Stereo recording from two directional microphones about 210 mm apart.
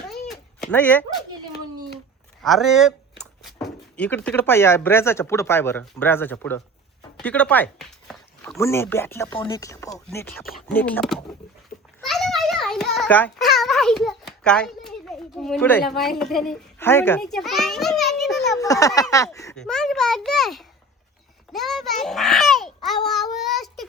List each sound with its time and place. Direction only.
0.1 s a sound: centre (ahead or behind)
2.4 s a child's voice: centre (ahead or behind)
7.2 s a sound: 5° left (ahead or behind)
8.5 s speech: 10° left (ahead or behind)
9.3 s speech: 25° left (ahead or behind); by 11.2 s 5° left (ahead or behind)
11.9 s a sound: centre (ahead or behind)
18.5 s speech: 15° left (ahead or behind)
19.5 s a child's voice: 5° left (ahead or behind)
23.0 s child singing: centre (ahead or behind)